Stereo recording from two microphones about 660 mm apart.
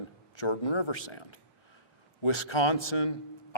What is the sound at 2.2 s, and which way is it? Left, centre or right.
Speech, left.